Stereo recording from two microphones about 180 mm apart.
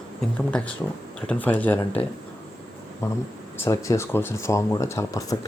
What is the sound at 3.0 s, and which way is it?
Speech, 15° left (ahead or behind).